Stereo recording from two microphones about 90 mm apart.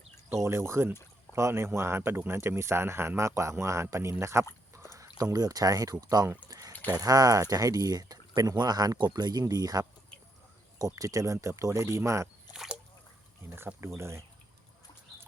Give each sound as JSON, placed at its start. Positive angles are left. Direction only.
{"t": 0.4, "sound": "a man's voice", "side_deg": -30}
{"t": 6.5, "sound": "a sound", "side_deg": -40}
{"t": 6.9, "sound": "speech", "side_deg": -45}
{"t": 13.6, "sound": "a man's voice", "side_deg": -30}